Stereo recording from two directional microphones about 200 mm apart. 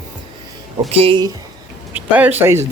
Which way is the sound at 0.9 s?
30° right (ahead or behind).